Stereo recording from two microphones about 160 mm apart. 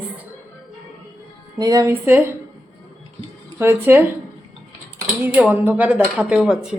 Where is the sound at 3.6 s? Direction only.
15° right (ahead or behind).